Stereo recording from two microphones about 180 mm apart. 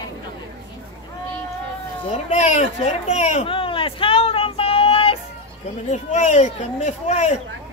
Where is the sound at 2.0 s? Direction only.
40° left (ahead or behind).